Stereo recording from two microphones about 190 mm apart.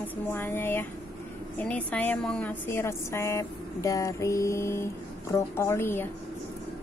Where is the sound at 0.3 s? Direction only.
10° left (ahead or behind).